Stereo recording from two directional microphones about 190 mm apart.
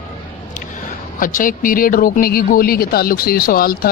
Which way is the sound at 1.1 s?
45° left (ahead or behind).